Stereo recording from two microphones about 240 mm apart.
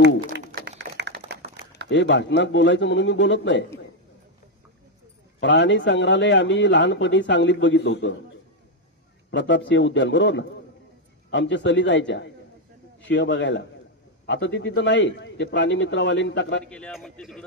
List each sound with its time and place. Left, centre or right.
0.0 s a sound: right
1.3 s run: right
1.9 s a man's voice: left
5.4 s a man's voice: left
9.3 s a man's voice: left
16.6 s a man's voice: centre